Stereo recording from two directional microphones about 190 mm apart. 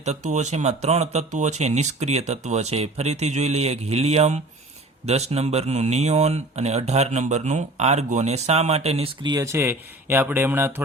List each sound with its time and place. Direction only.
0.0 s speech: 35° right (ahead or behind); by 10.8 s 10° right (ahead or behind)